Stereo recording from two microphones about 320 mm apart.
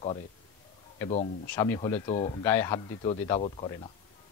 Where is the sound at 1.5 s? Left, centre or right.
Centre.